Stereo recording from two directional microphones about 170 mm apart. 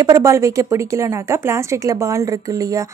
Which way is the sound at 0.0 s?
20° right (ahead or behind).